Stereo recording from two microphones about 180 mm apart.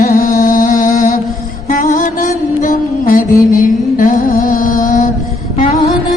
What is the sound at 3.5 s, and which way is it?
Mantra, 50° left (ahead or behind).